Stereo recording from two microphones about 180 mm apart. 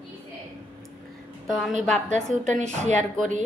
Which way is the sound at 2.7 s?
40° right (ahead or behind).